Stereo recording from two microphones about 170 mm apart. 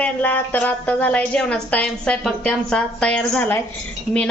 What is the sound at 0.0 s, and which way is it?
A woman's voice, 10° left (ahead or behind).